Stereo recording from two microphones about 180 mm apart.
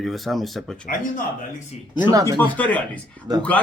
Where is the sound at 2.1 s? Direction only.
20° right (ahead or behind).